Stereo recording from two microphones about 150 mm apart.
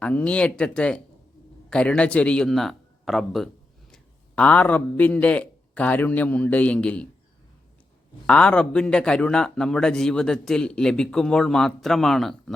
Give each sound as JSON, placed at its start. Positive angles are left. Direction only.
{"t": 0.0, "sound": "a man's voice", "side_deg": 5}
{"t": 8.3, "sound": "a man's voice", "side_deg": 5}